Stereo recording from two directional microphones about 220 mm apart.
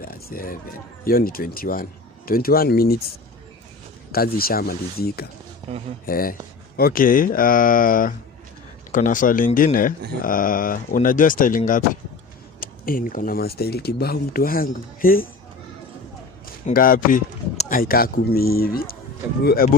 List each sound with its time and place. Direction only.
0.0 s speech: 40° left (ahead or behind)
4.1 s speech: 45° left (ahead or behind)
16.6 s speech: 40° left (ahead or behind)